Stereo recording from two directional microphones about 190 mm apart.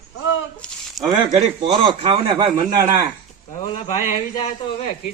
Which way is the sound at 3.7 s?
35° left (ahead or behind).